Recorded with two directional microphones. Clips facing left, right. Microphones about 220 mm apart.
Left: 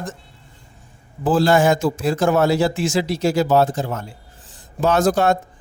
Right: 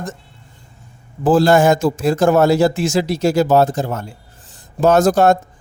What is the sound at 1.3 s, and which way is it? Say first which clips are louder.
Speech: right 4 dB; 45° right (ahead or behind).